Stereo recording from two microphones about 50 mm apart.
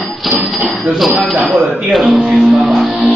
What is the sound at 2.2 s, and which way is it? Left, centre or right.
Music, centre.